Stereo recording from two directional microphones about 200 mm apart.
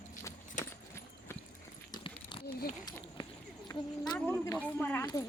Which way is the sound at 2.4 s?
50° left (ahead or behind).